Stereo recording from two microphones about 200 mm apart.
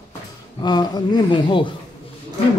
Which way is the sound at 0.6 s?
20° left (ahead or behind).